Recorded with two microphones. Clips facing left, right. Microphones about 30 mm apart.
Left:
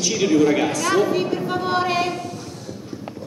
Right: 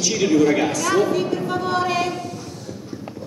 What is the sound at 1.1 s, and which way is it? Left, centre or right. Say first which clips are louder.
Speech: even; centre.